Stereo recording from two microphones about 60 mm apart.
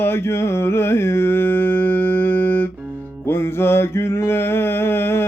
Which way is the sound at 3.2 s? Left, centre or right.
Left.